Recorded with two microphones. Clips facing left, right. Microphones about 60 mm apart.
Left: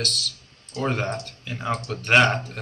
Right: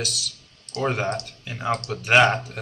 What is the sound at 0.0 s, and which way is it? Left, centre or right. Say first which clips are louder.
Speech: left 1 dB; centre.